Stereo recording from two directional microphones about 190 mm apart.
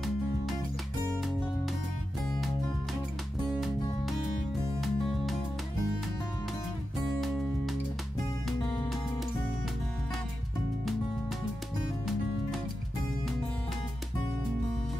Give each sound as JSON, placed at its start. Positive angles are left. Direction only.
{"t": 4.7, "sound": "music", "side_deg": 0}
{"t": 7.2, "sound": "music", "side_deg": 0}